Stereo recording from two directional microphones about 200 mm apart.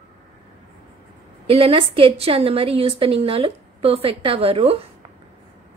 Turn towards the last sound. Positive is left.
turn(degrees=-30)  # may be behind; listen again after turning